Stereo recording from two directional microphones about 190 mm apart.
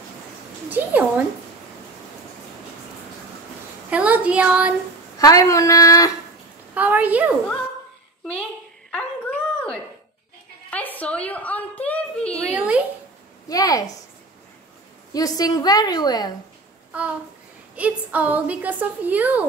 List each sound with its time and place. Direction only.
0.7 s a woman's voice: 10° right (ahead or behind)
3.9 s speech: 5° right (ahead or behind)
5.2 s speech: 15° left (ahead or behind)
6.7 s a woman's voice: 10° right (ahead or behind)
8.9 s dog: 5° left (ahead or behind)
10.7 s a sound: 10° left (ahead or behind)
12.5 s a sound: 5° right (ahead or behind)
13.5 s a woman's voice: 20° left (ahead or behind)
15.1 s a woman's voice: 20° left (ahead or behind)
16.9 s a woman's voice: 5° right (ahead or behind)